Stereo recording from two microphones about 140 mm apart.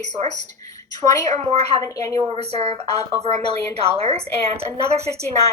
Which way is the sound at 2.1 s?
45° right (ahead or behind).